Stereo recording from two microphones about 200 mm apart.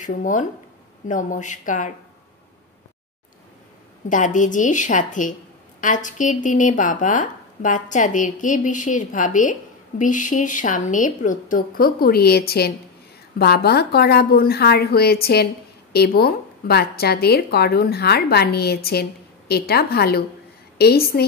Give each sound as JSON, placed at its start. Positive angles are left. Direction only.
{"t": 0.0, "sound": "speech", "side_deg": 40}
{"t": 4.1, "sound": "a woman's voice", "side_deg": 40}